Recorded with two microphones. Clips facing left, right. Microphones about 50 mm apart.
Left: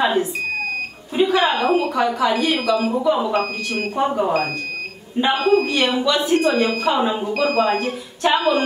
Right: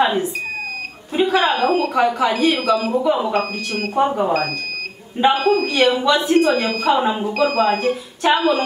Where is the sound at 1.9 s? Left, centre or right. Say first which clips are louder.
Right 2 dB; centre.